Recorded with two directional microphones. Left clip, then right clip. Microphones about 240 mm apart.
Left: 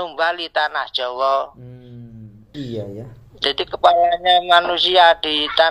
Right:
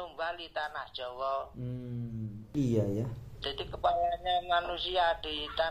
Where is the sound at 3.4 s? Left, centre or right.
Left.